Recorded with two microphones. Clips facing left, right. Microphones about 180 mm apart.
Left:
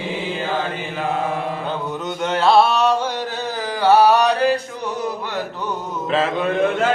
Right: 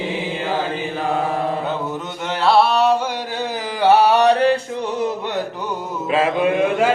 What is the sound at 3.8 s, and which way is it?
Music, 20° right (ahead or behind).